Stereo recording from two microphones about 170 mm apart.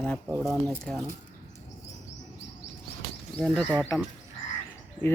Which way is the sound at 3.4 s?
5° left (ahead or behind).